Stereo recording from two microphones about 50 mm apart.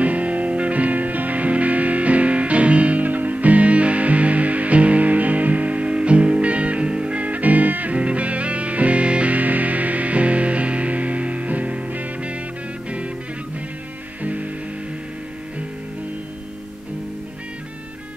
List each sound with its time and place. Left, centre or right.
0.0 s music: right
14.2 s music: right